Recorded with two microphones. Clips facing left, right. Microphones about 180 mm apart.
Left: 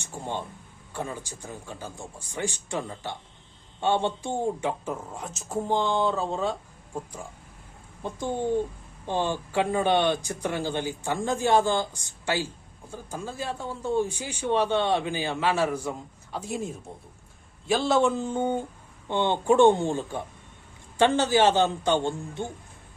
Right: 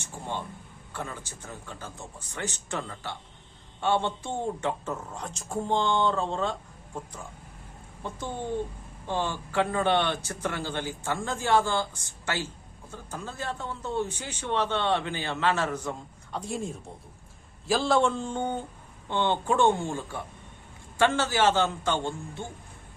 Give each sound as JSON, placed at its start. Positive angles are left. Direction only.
{"t": 0.0, "sound": "speech", "side_deg": 15}
{"t": 8.0, "sound": "speech", "side_deg": 15}